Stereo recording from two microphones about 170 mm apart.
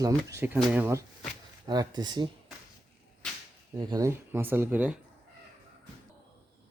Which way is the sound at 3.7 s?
20° right (ahead or behind).